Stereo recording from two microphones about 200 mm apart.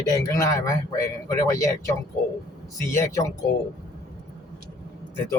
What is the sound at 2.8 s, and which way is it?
Speech, 15° left (ahead or behind).